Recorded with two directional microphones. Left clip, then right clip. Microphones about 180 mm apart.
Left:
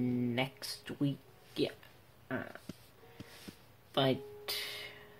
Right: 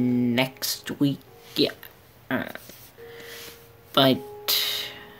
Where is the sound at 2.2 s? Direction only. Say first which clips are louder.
Right 12 dB; 20° right (ahead or behind).